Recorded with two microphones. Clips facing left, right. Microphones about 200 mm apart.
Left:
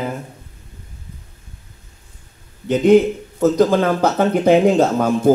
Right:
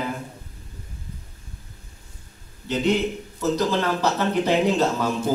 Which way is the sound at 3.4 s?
50° left (ahead or behind).